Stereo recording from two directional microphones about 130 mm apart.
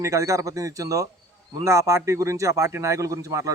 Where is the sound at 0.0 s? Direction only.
25° right (ahead or behind).